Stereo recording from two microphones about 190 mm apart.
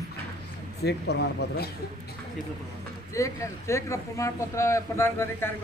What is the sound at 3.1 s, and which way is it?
Speech, 15° left (ahead or behind).